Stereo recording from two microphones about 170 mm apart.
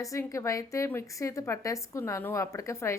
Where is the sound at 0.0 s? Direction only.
20° left (ahead or behind).